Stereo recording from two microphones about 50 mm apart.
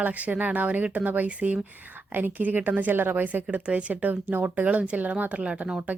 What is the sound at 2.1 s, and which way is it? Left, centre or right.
A woman's voice, right.